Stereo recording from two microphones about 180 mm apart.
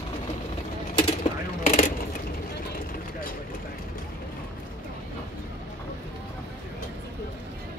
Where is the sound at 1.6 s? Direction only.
40° left (ahead or behind).